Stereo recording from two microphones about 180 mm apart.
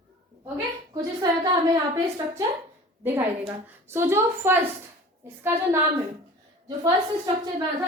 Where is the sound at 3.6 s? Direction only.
15° right (ahead or behind).